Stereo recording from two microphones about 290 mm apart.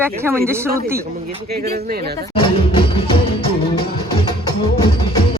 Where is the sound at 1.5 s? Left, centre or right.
Right.